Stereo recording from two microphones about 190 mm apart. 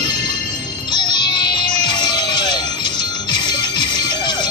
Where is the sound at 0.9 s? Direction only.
25° left (ahead or behind).